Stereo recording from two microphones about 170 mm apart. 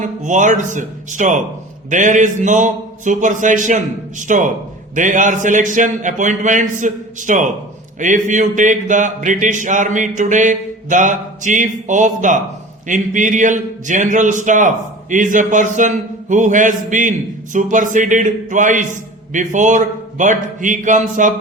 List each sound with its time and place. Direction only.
0.0 s speech: 45° right (ahead or behind)